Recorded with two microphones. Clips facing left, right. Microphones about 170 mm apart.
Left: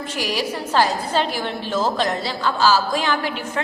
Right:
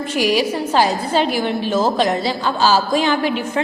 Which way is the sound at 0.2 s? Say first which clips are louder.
Right 7 dB; 15° right (ahead or behind).